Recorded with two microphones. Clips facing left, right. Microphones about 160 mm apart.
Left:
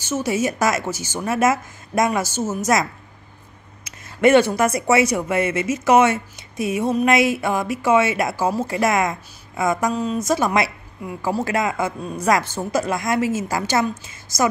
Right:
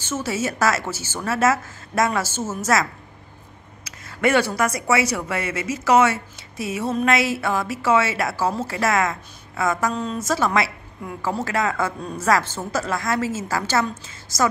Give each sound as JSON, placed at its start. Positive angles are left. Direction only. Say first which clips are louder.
{"t": 0.0, "sound": "speech", "louder": "left 4 dB", "side_deg": 15}